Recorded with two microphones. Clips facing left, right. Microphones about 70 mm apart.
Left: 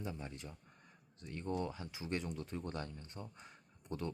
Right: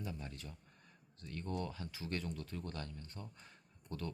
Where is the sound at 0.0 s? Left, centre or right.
Left.